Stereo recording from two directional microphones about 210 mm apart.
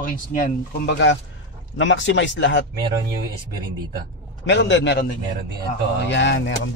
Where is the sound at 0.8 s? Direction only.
55° left (ahead or behind).